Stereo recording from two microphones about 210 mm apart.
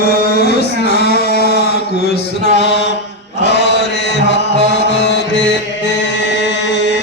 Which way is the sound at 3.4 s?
55° left (ahead or behind).